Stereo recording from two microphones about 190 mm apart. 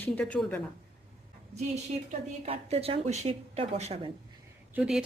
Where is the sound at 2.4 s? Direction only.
35° right (ahead or behind).